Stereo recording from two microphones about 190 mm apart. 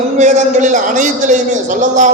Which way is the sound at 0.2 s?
40° right (ahead or behind).